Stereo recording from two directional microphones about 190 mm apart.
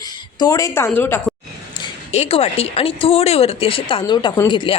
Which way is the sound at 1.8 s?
35° left (ahead or behind).